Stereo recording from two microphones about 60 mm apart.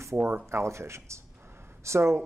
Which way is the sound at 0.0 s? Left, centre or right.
Right.